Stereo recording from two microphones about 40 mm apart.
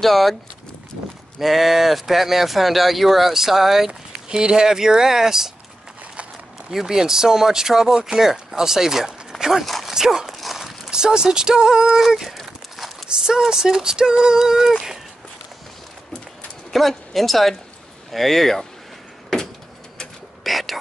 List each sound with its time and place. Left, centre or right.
0.0 s speech: centre
1.4 s speech: centre
4.3 s female singing: right
6.7 s female singing: centre
9.4 s speech: centre
9.8 s female singing: centre
10.3 s walk: centre
10.6 s a sound: centre
13.5 s female singing: centre
16.7 s speech: centre
20.4 s whispering: centre